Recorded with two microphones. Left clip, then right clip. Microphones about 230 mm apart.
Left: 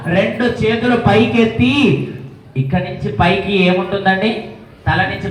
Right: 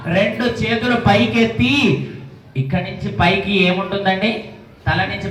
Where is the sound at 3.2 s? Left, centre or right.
Right.